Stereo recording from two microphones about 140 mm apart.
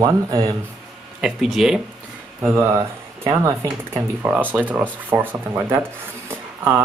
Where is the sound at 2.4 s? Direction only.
15° right (ahead or behind).